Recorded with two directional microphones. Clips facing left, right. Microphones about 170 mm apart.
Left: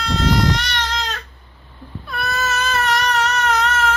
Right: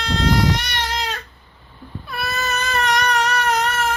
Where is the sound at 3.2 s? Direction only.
10° right (ahead or behind).